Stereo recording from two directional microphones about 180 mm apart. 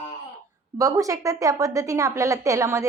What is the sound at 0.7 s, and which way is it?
A woman's voice, 20° right (ahead or behind).